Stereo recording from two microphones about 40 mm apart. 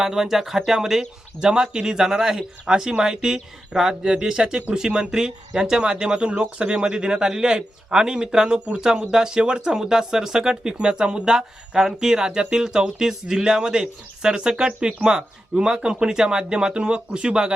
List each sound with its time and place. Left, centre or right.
0.0 s speech: centre